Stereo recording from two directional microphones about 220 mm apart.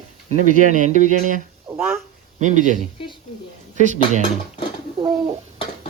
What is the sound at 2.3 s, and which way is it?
Speech, 35° right (ahead or behind).